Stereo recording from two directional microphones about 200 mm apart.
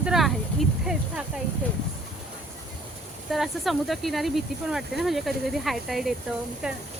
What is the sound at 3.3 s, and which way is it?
Speech, centre (ahead or behind).